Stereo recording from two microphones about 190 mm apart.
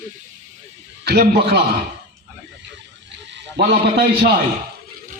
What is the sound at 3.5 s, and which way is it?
Speech, 55° right (ahead or behind).